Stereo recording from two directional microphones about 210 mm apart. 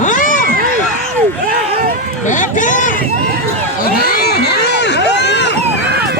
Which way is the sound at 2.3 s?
35° left (ahead or behind).